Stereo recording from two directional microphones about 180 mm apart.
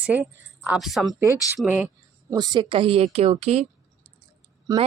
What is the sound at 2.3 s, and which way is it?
A woman's voice, 25° right (ahead or behind).